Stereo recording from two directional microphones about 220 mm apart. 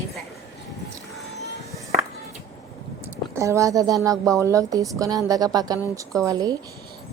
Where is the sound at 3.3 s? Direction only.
15° right (ahead or behind).